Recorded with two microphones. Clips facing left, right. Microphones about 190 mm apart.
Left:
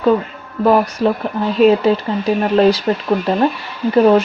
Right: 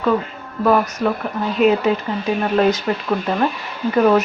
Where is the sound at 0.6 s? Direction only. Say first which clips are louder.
Left 3 dB; 30° left (ahead or behind).